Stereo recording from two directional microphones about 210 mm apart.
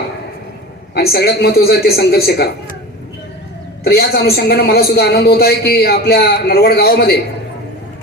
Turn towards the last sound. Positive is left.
turn(degrees=50)  # may be behind; listen again after turning